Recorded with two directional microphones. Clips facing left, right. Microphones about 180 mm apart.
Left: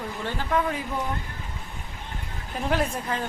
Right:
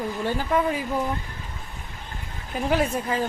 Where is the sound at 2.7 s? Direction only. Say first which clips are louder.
Right 3 dB; 5° right (ahead or behind).